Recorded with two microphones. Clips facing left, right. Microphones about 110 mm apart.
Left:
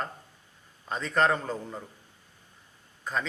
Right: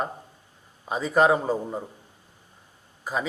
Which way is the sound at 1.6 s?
25° right (ahead or behind).